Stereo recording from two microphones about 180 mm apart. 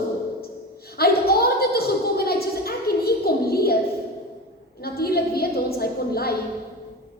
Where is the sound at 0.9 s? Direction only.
60° left (ahead or behind).